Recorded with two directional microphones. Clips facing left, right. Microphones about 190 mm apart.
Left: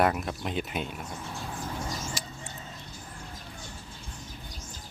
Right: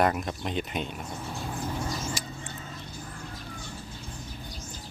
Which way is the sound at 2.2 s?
Centre (ahead or behind).